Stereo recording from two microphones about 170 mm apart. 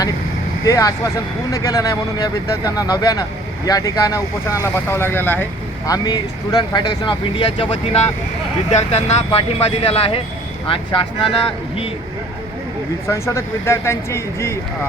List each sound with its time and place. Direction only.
0.6 s speech: 20° left (ahead or behind)
13.1 s speech: 15° left (ahead or behind)